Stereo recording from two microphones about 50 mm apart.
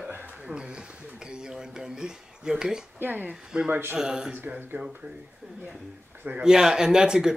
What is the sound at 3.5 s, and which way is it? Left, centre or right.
Speech, centre.